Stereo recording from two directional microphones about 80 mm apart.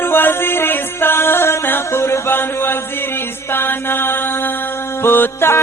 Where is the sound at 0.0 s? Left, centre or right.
Left.